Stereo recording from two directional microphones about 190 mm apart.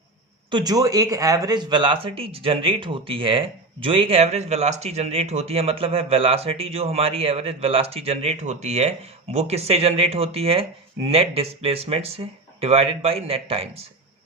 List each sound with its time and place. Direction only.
0.5 s speech: 20° right (ahead or behind)